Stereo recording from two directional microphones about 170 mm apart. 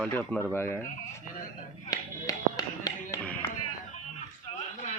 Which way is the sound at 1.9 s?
20° left (ahead or behind).